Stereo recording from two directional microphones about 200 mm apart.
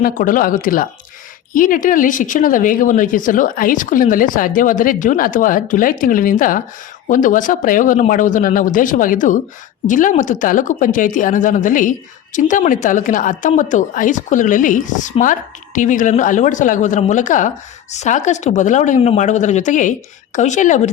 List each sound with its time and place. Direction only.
0.0 s speech: 45° left (ahead or behind)